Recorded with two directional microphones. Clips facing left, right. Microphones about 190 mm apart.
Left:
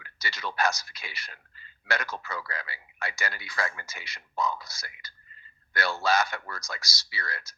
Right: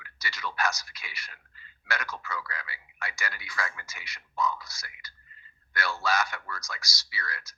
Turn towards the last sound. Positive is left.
turn(degrees=30)  # may be behind; listen again after turning